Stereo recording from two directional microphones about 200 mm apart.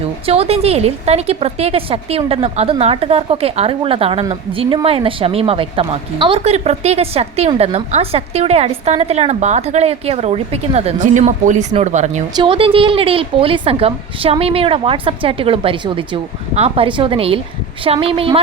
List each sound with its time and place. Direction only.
0.0 s speech: 30° right (ahead or behind)
12.3 s a woman's voice: 25° right (ahead or behind)